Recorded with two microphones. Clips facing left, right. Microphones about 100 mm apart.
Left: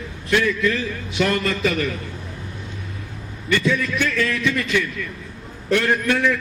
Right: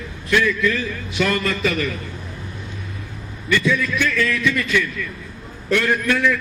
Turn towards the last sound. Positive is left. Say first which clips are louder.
# even
turn(degrees=35)  # may be behind; listen again after turning